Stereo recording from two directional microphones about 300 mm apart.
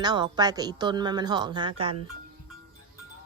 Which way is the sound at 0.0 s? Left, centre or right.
Centre.